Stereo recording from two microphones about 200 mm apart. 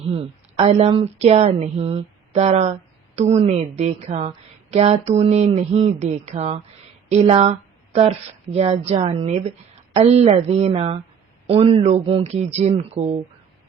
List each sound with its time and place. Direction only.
0.0 s a woman's voice: 30° right (ahead or behind)
8.5 s a woman's voice: 30° right (ahead or behind)